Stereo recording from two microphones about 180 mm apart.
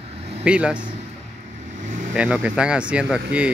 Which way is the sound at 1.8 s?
45° right (ahead or behind).